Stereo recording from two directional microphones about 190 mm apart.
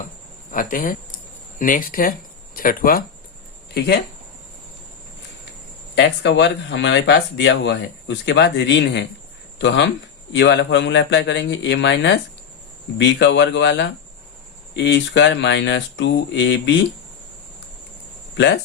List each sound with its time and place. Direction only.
0.5 s speech: 45° left (ahead or behind)
5.9 s speech: 65° left (ahead or behind)
18.3 s speech: 65° left (ahead or behind)